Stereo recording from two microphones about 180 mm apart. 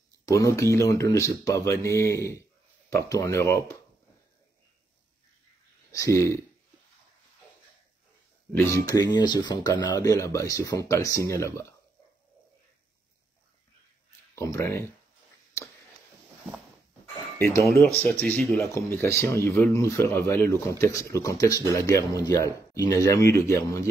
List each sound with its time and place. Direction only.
0.2 s speech: 20° left (ahead or behind)
6.1 s speech: 15° left (ahead or behind)
8.5 s speech: 15° left (ahead or behind)
14.3 s speech: 15° left (ahead or behind)
17.4 s speech: 15° left (ahead or behind)